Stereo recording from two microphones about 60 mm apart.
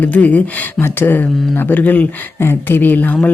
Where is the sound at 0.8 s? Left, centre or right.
Left.